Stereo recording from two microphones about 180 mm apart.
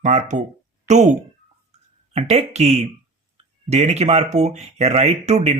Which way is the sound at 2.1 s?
40° right (ahead or behind).